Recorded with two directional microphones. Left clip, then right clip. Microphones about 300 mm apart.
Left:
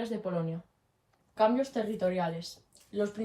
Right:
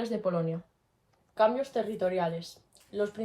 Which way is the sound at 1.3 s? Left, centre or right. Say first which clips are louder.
Right 1 dB; right.